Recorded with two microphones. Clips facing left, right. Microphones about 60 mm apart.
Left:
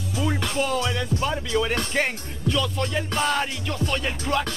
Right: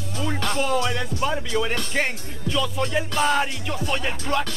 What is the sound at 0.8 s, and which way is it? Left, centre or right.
Music, centre.